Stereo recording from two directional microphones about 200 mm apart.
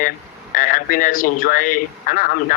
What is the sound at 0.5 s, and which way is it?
Speech, 40° left (ahead or behind).